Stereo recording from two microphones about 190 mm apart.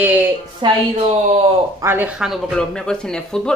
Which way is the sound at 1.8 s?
10° right (ahead or behind).